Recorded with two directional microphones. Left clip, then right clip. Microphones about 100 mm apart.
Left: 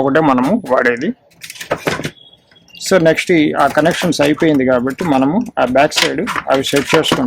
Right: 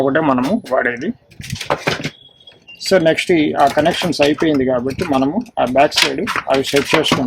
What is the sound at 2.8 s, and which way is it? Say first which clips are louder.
Speech: left 2 dB; 40° left (ahead or behind).